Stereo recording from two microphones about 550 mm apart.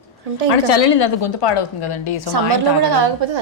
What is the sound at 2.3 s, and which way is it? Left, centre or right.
A woman's voice, right.